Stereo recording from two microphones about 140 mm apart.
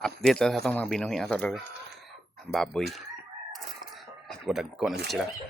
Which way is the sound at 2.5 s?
5° left (ahead or behind).